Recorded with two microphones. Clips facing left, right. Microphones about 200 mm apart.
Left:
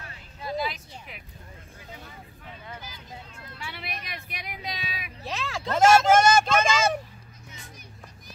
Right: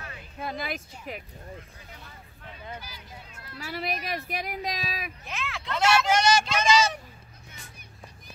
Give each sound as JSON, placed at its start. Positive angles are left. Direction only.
{"t": 0.4, "sound": "a sound", "side_deg": -55}
{"t": 3.5, "sound": "speech", "side_deg": -40}
{"t": 5.2, "sound": "speech", "side_deg": 35}